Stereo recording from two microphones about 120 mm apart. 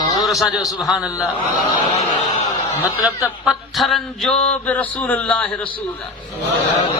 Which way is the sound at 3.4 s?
Centre (ahead or behind).